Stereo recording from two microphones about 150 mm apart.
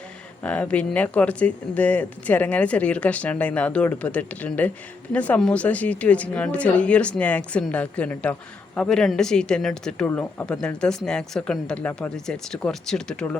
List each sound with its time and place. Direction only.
0.4 s a woman's voice: 10° left (ahead or behind)